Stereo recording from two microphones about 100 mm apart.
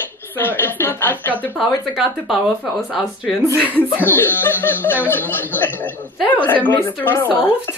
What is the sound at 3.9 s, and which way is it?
Speech, 20° left (ahead or behind).